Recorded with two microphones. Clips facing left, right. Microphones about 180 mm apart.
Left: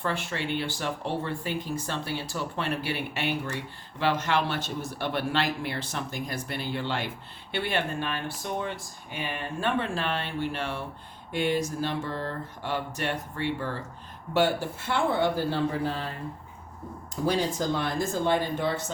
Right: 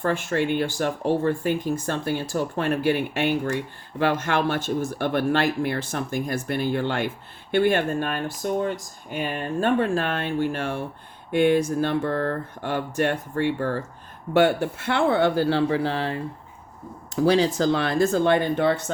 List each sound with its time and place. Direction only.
0.0 s speech: 45° right (ahead or behind)
14.3 s speech: 60° right (ahead or behind); by 16.2 s 90° right
17.2 s speech: 90° right; by 18.8 s 65° right (ahead or behind)